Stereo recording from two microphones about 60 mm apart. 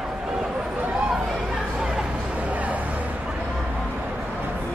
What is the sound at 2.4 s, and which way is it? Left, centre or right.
Music, right.